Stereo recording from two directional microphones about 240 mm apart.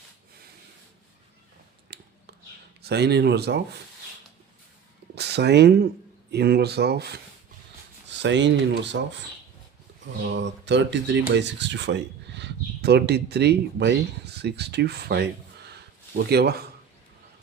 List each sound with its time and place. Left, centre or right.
1.9 s finger snapping: right
2.8 s speech: right
5.1 s speech: right
8.2 s speech: right
10.2 s speech: right
15.7 s a sound: right